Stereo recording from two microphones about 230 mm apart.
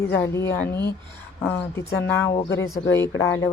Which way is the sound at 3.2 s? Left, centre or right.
Centre.